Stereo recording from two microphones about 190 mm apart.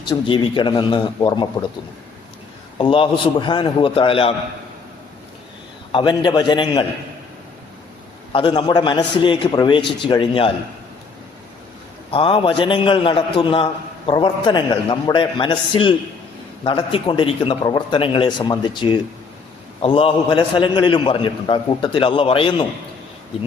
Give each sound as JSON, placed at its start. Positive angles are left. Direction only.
{"t": 0.0, "sound": "a man's voice", "side_deg": 25}
{"t": 2.7, "sound": "a man's voice", "side_deg": 30}
{"t": 5.9, "sound": "a man's voice", "side_deg": 25}
{"t": 8.3, "sound": "a man's voice", "side_deg": 25}
{"t": 12.1, "sound": "a man's voice", "side_deg": 25}